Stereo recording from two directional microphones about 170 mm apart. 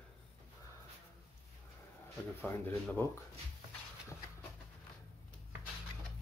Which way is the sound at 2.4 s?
10° left (ahead or behind).